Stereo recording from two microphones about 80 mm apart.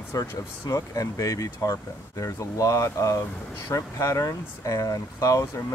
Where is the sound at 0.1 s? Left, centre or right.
Left.